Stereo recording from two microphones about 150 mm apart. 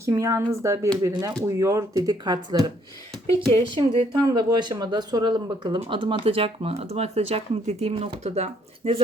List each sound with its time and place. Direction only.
0.0 s speech: 20° right (ahead or behind); by 9.0 s 45° right (ahead or behind)